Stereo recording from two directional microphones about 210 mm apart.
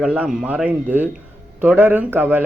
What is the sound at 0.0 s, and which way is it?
Speech, 5° right (ahead or behind).